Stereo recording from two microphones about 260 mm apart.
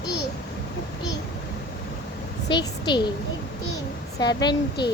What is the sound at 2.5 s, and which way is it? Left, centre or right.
Speech, centre.